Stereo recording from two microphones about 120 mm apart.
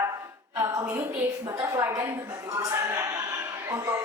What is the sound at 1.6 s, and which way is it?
A woman's voice, 25° right (ahead or behind).